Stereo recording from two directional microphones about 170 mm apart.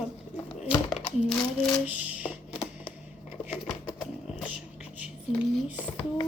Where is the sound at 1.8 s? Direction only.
10° right (ahead or behind).